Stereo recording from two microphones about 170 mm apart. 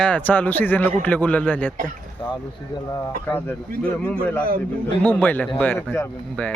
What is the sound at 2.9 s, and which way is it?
A man's voice, 15° left (ahead or behind).